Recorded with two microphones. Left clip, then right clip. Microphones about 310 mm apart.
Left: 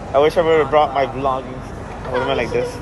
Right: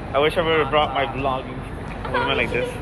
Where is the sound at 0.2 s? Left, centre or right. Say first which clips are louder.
Left 5 dB; left.